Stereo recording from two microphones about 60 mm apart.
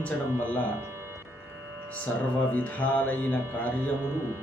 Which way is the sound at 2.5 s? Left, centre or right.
Left.